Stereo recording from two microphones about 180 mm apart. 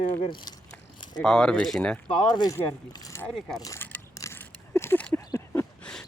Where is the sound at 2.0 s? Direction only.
25° left (ahead or behind).